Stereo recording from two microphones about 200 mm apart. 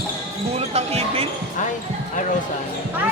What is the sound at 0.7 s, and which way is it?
Basketball bounce, 30° right (ahead or behind).